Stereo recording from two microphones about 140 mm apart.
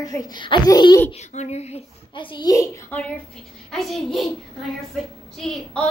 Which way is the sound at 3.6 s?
Centre (ahead or behind).